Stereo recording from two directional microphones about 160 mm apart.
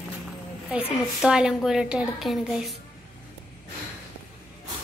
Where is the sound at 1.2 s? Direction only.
5° right (ahead or behind).